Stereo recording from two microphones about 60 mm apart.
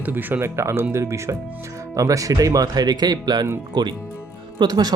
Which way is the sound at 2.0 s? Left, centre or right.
Right.